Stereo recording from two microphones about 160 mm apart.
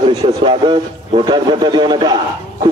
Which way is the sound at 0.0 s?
40° right (ahead or behind).